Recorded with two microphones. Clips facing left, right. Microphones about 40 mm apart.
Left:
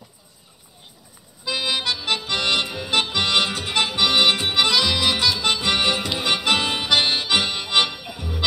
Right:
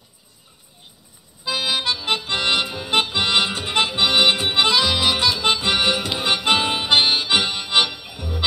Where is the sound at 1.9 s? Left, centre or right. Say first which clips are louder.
Right 1 dB; right.